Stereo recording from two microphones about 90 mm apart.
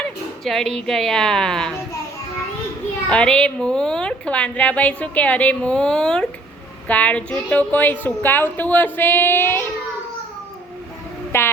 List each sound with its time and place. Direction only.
0.0 s speech: 5° left (ahead or behind)
3.1 s a woman's voice: 10° left (ahead or behind)
11.3 s a sound: 25° left (ahead or behind)